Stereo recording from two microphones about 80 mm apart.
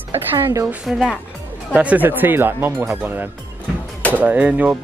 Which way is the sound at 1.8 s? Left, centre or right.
Centre.